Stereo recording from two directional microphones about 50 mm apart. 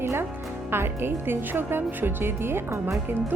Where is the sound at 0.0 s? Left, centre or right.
Right.